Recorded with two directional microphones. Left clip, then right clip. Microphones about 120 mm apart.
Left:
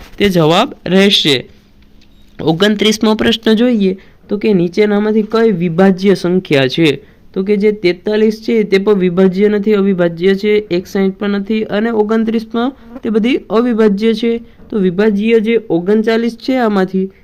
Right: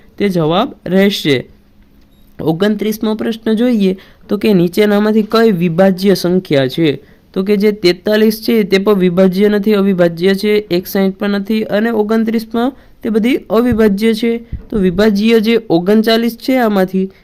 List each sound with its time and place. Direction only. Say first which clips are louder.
0.2 s speech: left 3 dB; 10° right (ahead or behind)
0.9 s speech: left 3 dB; 20° right (ahead or behind)
2.6 s speech: left 7 dB; centre (ahead or behind)
3.8 s speech: even; 35° right (ahead or behind)
5.7 s speech: even; 25° right (ahead or behind)
7.3 s speech: even; 35° right (ahead or behind); by 14.9 s 20° right (ahead or behind)
14.9 s speech: right 1 dB; 40° right (ahead or behind)
15.4 s speech: right 1 dB; 60° right (ahead or behind)
15.8 s speech: right 1 dB; 40° right (ahead or behind); by 17.1 s 25° right (ahead or behind)